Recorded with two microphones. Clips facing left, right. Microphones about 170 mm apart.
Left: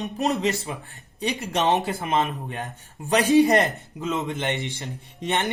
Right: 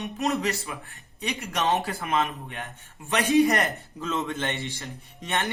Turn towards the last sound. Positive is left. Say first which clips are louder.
# left 4 dB
turn(degrees=20)  # may be behind; listen again after turning